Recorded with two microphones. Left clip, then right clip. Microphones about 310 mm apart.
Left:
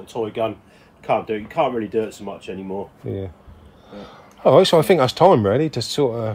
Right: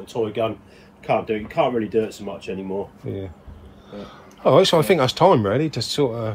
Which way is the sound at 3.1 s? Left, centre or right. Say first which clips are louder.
Left 2 dB; left.